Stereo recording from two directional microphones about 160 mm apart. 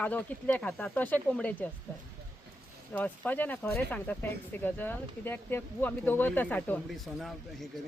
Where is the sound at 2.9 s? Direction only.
10° left (ahead or behind).